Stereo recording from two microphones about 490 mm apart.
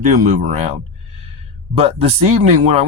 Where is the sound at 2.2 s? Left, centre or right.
Right.